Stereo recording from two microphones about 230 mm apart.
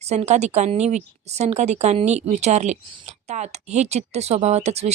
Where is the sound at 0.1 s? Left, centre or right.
Right.